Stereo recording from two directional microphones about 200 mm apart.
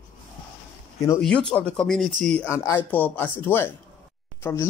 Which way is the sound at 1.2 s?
5° left (ahead or behind).